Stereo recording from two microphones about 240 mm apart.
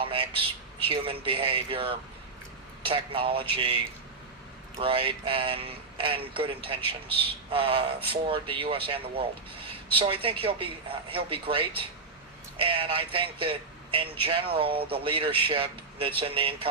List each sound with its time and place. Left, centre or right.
0.0 s speech: right
4.8 s speech: right